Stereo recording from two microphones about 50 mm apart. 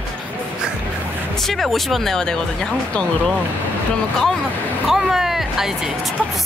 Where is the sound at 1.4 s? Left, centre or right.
Centre.